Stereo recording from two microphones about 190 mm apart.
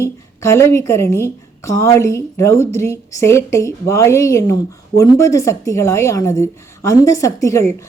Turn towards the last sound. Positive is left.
turn(degrees=15)  # may be behind; listen again after turning